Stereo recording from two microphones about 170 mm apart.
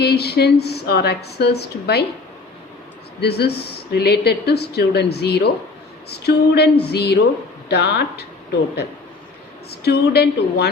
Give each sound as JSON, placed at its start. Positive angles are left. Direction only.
{"t": 0.0, "sound": "speech", "side_deg": 70}
{"t": 3.2, "sound": "speech", "side_deg": 70}
{"t": 9.6, "sound": "speech", "side_deg": 70}